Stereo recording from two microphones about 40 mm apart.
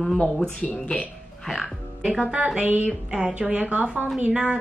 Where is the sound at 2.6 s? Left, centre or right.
Right.